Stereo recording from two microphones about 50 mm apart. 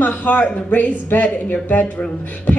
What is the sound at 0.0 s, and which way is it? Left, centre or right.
A woman's voice, left.